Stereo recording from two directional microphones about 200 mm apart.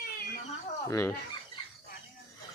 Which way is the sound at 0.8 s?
15° left (ahead or behind).